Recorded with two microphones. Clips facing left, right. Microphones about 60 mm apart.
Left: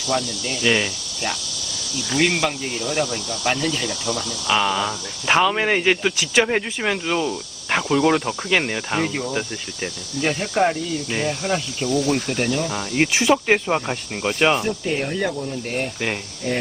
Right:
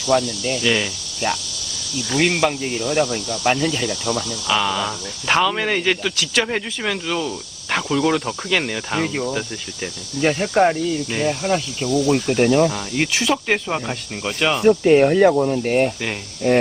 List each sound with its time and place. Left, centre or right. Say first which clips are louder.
0.1 s speech: right 5 dB; centre
14.7 s speech: right 11 dB; right